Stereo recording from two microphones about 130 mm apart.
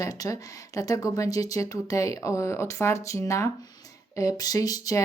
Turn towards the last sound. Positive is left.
turn(degrees=30)  # may be behind; listen again after turning